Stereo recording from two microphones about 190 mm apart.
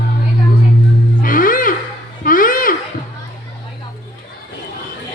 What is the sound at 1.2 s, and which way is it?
Music, 45° left (ahead or behind).